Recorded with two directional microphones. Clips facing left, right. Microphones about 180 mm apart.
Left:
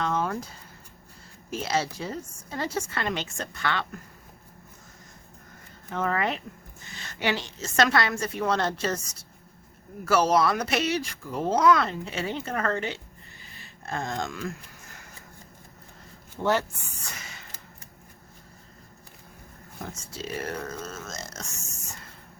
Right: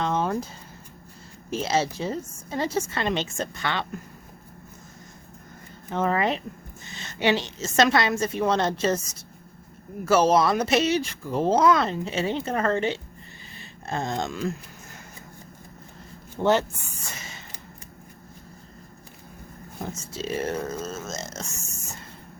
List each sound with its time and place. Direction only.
0.0 s a sound: 20° right (ahead or behind)
1.5 s speech: 25° right (ahead or behind)
5.9 s speech: 25° right (ahead or behind)
10.0 s speech: 20° right (ahead or behind)
16.4 s speech: 25° right (ahead or behind)
17.2 s a sound: 25° right (ahead or behind)
19.8 s speech: 25° right (ahead or behind)